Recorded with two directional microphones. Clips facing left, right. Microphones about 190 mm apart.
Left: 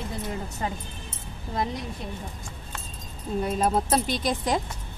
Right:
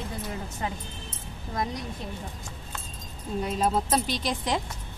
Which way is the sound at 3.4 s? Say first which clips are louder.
Left 1 dB; 50° left (ahead or behind).